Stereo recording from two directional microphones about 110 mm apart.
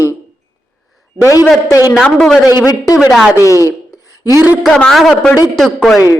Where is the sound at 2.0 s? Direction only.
5° left (ahead or behind).